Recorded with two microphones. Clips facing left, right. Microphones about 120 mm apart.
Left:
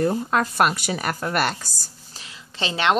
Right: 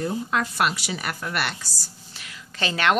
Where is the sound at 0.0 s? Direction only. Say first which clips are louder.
Left 4 dB; 50° left (ahead or behind).